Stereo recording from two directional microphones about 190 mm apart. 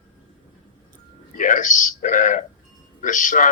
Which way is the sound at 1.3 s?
45° left (ahead or behind).